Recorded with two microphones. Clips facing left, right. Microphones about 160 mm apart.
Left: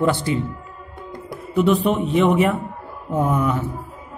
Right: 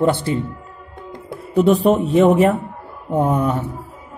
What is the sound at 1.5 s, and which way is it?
Speech, 40° right (ahead or behind).